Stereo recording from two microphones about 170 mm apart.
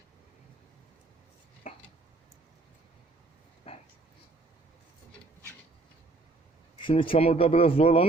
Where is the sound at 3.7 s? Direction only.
35° left (ahead or behind).